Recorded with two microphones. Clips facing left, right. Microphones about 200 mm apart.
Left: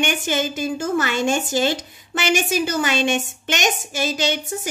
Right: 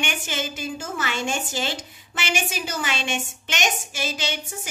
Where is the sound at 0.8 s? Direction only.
60° left (ahead or behind).